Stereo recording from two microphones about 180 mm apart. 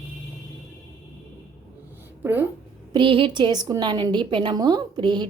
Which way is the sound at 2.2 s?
10° right (ahead or behind).